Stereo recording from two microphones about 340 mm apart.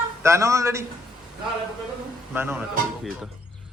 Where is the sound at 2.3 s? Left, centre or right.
Centre.